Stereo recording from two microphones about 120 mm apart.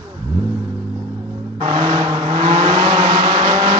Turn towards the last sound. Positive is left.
turn(degrees=-45)  # may be behind; listen again after turning